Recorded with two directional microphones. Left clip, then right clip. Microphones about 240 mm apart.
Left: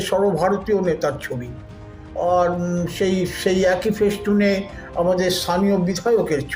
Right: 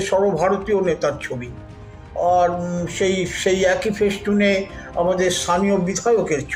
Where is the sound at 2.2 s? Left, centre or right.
Centre.